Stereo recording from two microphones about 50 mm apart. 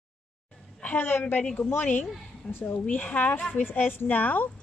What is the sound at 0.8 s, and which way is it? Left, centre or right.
Speech, left.